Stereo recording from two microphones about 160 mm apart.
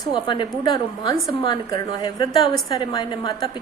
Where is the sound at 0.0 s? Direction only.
30° left (ahead or behind).